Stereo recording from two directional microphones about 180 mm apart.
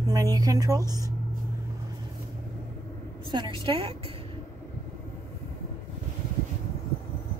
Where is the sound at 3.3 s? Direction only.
25° right (ahead or behind).